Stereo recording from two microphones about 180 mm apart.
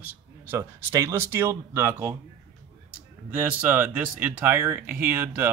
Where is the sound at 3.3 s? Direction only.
10° right (ahead or behind).